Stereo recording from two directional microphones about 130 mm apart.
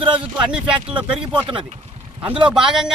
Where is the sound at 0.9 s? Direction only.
40° right (ahead or behind).